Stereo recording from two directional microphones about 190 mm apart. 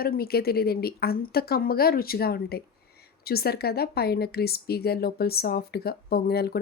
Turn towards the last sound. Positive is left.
turn(degrees=55)  # may be behind; listen again after turning